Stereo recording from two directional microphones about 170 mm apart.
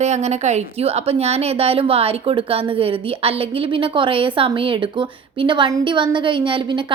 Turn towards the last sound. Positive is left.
turn(degrees=-30)  # may be behind; listen again after turning